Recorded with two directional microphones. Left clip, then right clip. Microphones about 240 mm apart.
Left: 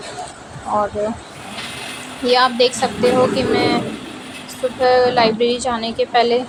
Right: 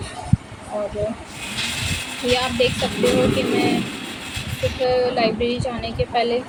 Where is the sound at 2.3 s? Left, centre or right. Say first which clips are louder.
Left 6 dB; centre.